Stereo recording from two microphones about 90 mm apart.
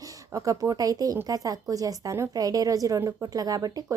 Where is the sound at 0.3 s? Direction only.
40° right (ahead or behind).